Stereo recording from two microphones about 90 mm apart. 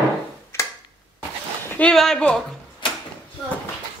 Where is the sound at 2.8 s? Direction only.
65° left (ahead or behind).